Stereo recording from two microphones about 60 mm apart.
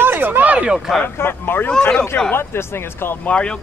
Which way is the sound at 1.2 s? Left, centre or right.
Left.